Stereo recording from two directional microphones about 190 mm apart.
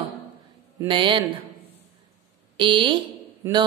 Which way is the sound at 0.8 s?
25° right (ahead or behind).